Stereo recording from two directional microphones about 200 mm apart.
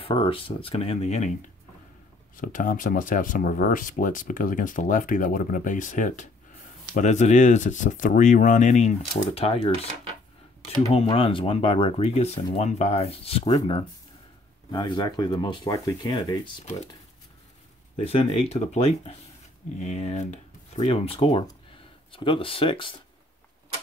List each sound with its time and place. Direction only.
0.0 s speech: 25° left (ahead or behind)
2.4 s speech: 40° left (ahead or behind)
10.9 s speech: 30° left (ahead or behind)
14.7 s speech: 20° left (ahead or behind)
17.9 s speech: 30° left (ahead or behind)